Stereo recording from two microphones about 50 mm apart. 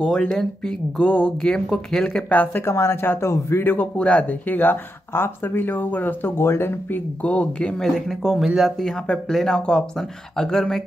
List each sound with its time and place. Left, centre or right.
0.0 s speech: centre
2.2 s speech: left
2.6 s speech: left
3.0 s speech: left
3.6 s speech: left
4.0 s speech: left
6.4 s speech: left
7.2 s speech: left